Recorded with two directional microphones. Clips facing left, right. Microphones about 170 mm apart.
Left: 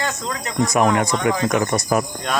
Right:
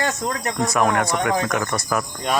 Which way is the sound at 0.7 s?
15° left (ahead or behind).